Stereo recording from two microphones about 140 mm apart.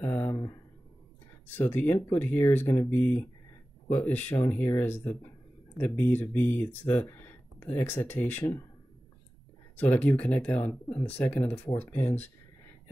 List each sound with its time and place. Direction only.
0.0 s a sound: 15° left (ahead or behind)
1.5 s speech: 15° left (ahead or behind)
9.8 s speech: 10° left (ahead or behind)